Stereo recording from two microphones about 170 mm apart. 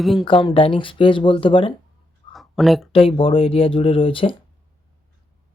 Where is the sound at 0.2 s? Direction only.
30° left (ahead or behind).